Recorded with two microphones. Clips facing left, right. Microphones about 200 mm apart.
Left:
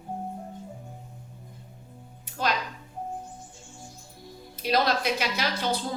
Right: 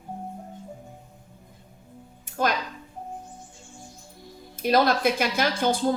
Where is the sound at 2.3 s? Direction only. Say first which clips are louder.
Right 7 dB; 50° right (ahead or behind).